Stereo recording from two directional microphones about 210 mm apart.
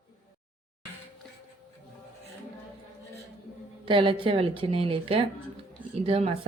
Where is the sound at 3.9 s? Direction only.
25° right (ahead or behind).